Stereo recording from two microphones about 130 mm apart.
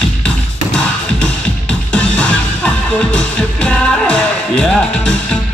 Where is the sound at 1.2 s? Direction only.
10° left (ahead or behind).